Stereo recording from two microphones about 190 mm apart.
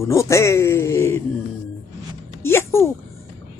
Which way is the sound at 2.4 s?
10° left (ahead or behind).